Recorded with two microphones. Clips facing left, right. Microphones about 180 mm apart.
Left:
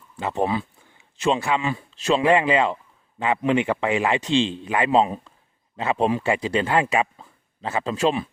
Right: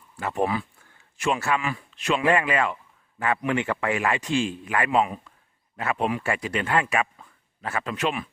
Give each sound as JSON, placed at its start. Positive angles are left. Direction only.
{"t": 0.2, "sound": "speech", "side_deg": 20}